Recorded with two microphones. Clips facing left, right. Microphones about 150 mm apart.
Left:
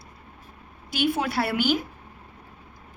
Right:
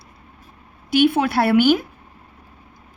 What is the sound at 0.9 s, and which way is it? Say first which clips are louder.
Speech: right 8 dB; 60° right (ahead or behind).